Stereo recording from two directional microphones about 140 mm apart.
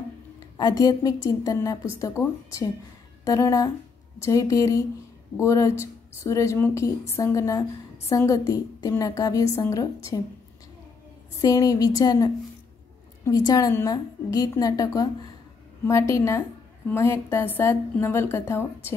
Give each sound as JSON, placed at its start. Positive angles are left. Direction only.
{"t": 0.6, "sound": "a woman's voice", "side_deg": 30}
{"t": 11.4, "sound": "a woman's voice", "side_deg": 25}